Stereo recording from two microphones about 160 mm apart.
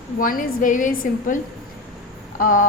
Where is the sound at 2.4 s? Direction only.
55° left (ahead or behind).